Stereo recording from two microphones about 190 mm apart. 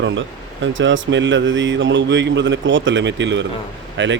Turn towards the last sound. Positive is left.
turn(degrees=-75)  # may be behind; listen again after turning